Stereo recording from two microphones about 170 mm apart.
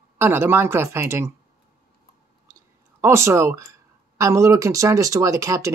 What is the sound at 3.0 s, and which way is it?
Speech, 15° right (ahead or behind).